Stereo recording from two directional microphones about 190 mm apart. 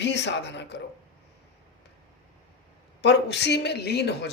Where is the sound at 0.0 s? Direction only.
65° left (ahead or behind).